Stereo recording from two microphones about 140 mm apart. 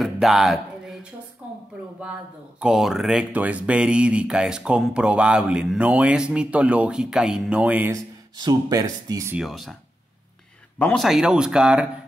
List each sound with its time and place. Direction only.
0.0 s music: centre (ahead or behind)
1.4 s a sound: 10° right (ahead or behind)
2.6 s speech: 5° right (ahead or behind)
7.9 s speech: 30° right (ahead or behind)
9.4 s speech: centre (ahead or behind)
10.8 s speech: 10° left (ahead or behind)
11.1 s speech: 5° right (ahead or behind)